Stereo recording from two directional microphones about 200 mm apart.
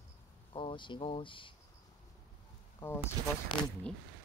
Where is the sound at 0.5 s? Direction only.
25° left (ahead or behind).